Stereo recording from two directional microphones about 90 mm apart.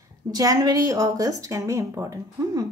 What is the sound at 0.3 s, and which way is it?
A woman's voice, 45° right (ahead or behind).